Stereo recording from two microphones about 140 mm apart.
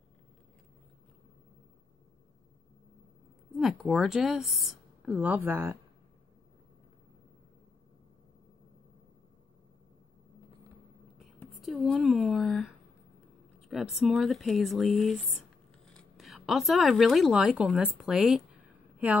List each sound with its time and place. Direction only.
3.5 s speech: 5° right (ahead or behind)
11.6 s speech: centre (ahead or behind)